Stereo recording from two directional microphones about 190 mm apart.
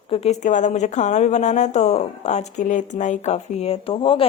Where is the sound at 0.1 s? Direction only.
35° left (ahead or behind).